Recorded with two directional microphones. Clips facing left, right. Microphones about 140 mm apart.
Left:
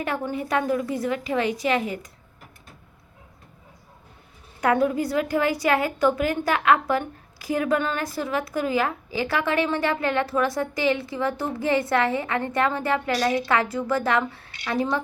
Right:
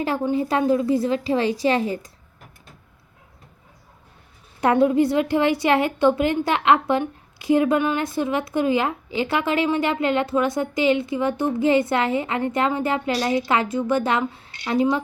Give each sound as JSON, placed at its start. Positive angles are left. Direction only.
{"t": 0.0, "sound": "a woman's voice", "side_deg": -25}
{"t": 4.6, "sound": "a woman's voice", "side_deg": -25}